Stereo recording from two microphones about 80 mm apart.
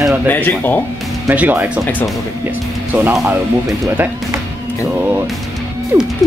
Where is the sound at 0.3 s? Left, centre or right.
Left.